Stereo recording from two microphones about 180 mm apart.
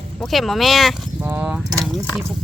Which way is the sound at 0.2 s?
Centre (ahead or behind).